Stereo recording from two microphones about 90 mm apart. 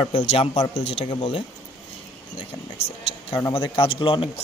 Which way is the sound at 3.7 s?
85° left.